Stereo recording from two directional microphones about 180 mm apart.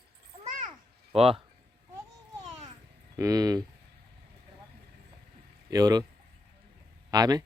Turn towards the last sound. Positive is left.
turn(degrees=-20)  # may be behind; listen again after turning